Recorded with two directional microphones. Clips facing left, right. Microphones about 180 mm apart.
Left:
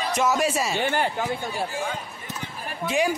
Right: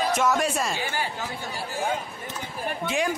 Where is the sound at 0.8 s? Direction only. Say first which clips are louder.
Left 6 dB; 60° left (ahead or behind).